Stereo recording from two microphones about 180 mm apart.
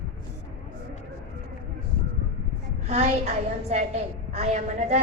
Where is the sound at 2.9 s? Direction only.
40° right (ahead or behind).